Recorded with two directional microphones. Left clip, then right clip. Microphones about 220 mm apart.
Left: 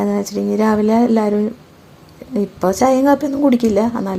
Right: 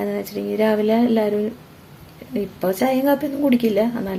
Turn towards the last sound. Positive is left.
turn(degrees=20)  # may be behind; listen again after turning